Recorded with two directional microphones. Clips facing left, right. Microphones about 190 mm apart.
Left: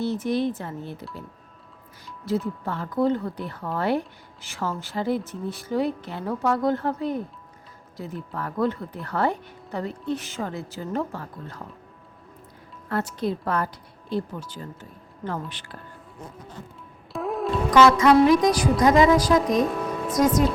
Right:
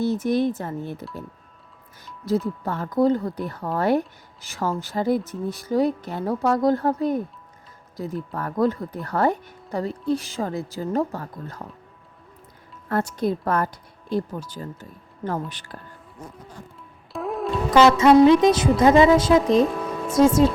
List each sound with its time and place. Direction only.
0.0 s speech: 45° right (ahead or behind)
2.6 s speech: 45° right (ahead or behind)
13.1 s speech: 45° right (ahead or behind)
17.1 s music: centre (ahead or behind)
17.7 s music: 25° right (ahead or behind)
19.6 s music: centre (ahead or behind)
20.1 s music: 25° right (ahead or behind)